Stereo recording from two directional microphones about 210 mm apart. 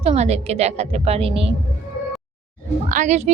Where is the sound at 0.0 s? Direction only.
30° right (ahead or behind).